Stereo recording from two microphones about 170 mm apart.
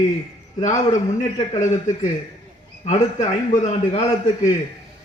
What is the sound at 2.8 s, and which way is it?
A man's voice, 45° left (ahead or behind).